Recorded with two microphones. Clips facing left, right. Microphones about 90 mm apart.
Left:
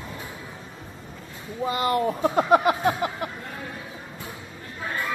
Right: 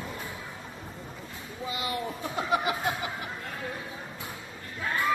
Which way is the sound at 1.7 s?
50° left (ahead or behind).